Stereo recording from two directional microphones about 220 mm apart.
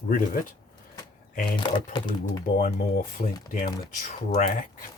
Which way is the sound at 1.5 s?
20° left (ahead or behind).